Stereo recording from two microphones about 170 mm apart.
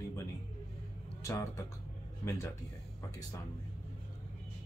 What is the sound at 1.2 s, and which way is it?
Speech, 20° left (ahead or behind).